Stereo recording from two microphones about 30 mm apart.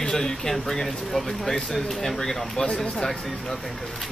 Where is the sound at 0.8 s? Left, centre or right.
Centre.